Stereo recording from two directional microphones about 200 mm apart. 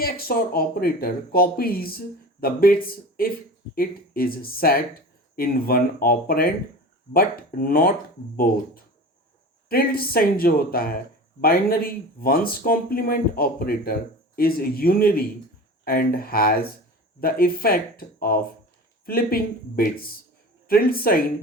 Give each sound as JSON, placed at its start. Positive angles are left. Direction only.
{"t": 0.0, "sound": "speech", "side_deg": 50}